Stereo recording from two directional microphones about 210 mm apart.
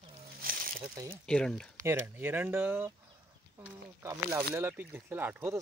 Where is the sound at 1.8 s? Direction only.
10° right (ahead or behind).